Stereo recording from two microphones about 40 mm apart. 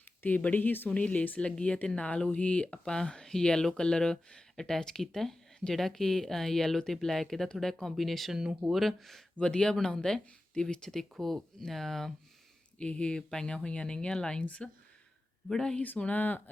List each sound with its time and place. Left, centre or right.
0.2 s speech: left
0.9 s a woman's voice: left
1.5 s speech: left; by 8.3 s centre
8.3 s speech: centre
8.7 s speech: centre
9.4 s speech: left
12.8 s speech: left
14.4 s a woman's voice: left
15.4 s speech: centre
16.1 s speech: left